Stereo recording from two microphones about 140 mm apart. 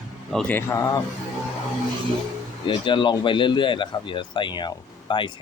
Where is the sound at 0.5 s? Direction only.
20° left (ahead or behind).